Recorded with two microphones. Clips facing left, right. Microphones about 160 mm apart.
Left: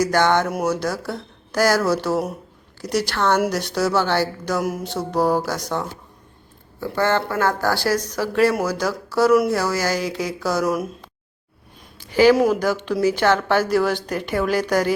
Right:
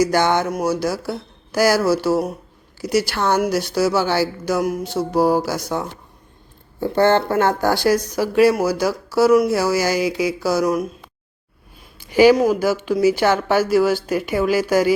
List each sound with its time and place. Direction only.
0.0 s speech: 10° right (ahead or behind)
6.7 s speech: 25° right (ahead or behind); by 10.8 s centre (ahead or behind)
11.9 s a sound: 15° right (ahead or behind)
12.4 s speech: 5° right (ahead or behind)